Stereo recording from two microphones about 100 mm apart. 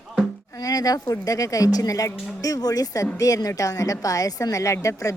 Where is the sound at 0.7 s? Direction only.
40° left (ahead or behind).